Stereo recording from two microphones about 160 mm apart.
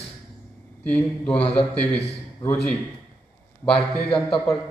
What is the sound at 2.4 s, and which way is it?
Speech, 30° left (ahead or behind).